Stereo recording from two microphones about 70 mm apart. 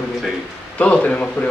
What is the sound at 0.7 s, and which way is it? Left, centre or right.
Speech, centre.